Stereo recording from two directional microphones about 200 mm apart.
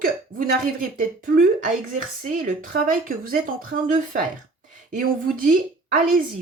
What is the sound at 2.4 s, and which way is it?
A woman's voice, 40° right (ahead or behind).